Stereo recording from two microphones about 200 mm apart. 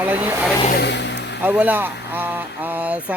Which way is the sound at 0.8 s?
60° left (ahead or behind).